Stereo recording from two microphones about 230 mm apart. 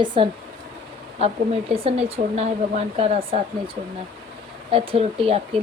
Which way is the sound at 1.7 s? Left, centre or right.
Right.